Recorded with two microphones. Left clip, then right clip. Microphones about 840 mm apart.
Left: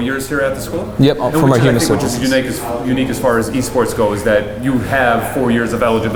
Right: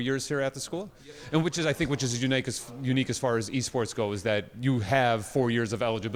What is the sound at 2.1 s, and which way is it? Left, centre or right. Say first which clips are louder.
Speech: left 13 dB; right.